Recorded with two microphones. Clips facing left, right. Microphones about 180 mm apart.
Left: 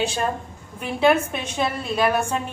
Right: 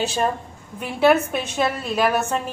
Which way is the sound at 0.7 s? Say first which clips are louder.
Right 2 dB; 5° right (ahead or behind).